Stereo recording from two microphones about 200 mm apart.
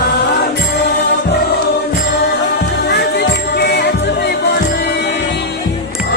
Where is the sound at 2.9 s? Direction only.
55° left (ahead or behind).